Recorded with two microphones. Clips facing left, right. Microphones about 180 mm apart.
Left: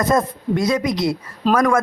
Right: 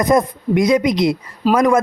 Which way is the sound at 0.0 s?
15° right (ahead or behind).